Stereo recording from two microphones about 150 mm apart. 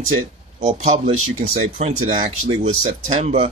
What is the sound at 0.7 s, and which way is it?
Speech, 50° right (ahead or behind).